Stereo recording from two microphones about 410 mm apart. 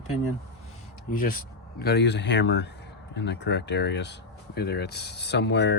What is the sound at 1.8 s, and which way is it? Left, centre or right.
Speech, left.